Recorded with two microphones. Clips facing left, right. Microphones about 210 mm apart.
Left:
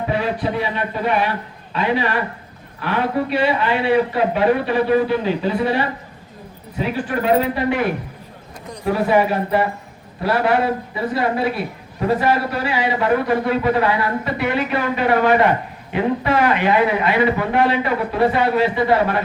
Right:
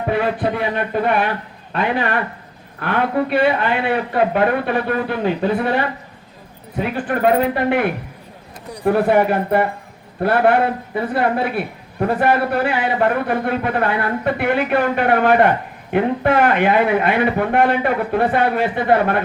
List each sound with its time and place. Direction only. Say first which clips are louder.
0.0 s a man's voice: right 2 dB; 55° right (ahead or behind)